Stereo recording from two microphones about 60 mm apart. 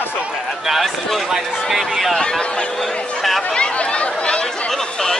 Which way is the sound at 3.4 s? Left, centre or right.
Centre.